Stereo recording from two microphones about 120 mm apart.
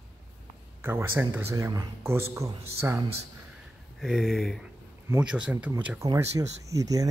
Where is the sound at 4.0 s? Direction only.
Centre (ahead or behind).